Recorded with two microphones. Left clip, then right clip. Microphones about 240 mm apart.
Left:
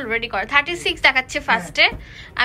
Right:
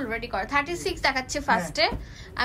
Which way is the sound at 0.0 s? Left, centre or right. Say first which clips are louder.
Left 7 dB; centre.